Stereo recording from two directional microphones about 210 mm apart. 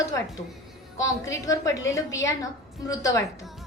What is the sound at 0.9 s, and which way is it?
A woman's voice, 15° left (ahead or behind).